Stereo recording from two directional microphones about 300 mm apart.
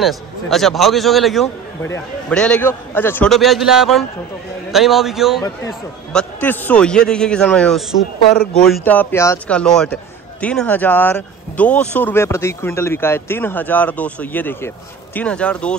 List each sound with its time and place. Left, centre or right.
0.0 s speech: centre